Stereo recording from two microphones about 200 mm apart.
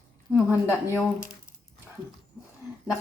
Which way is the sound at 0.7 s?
10° left (ahead or behind).